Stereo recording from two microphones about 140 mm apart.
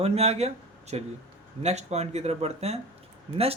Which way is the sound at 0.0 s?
45° right (ahead or behind).